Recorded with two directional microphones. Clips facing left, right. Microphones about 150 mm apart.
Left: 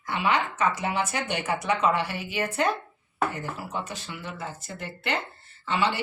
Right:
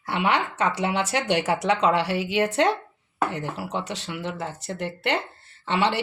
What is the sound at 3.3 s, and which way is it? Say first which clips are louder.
Speech: right 4 dB; 80° right.